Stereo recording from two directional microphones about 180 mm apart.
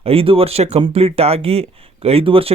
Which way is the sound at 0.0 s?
30° right (ahead or behind).